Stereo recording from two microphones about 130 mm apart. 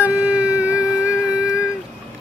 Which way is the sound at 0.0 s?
10° right (ahead or behind).